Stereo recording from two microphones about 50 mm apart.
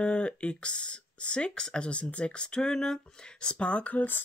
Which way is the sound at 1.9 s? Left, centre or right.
Left.